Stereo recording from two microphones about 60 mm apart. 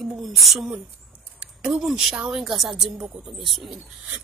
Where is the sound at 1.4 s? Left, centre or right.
Centre.